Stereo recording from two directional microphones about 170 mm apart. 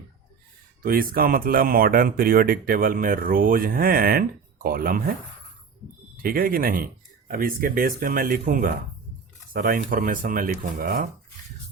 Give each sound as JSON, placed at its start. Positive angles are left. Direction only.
{"t": 0.8, "sound": "speech", "side_deg": -60}
{"t": 6.2, "sound": "speech", "side_deg": -60}